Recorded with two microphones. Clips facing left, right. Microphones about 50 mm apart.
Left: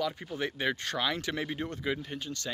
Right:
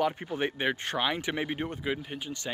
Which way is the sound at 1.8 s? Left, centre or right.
Centre.